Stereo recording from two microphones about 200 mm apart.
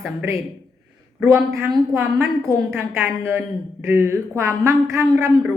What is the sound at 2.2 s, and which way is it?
Speech, 10° right (ahead or behind).